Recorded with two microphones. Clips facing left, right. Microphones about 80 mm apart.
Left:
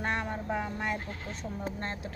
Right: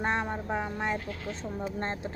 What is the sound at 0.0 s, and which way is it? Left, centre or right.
Speech, right.